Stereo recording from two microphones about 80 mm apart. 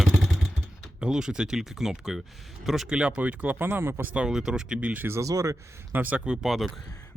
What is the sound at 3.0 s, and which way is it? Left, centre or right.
Speech, centre.